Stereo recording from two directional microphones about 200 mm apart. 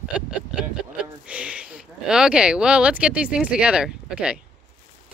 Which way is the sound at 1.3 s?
5° right (ahead or behind).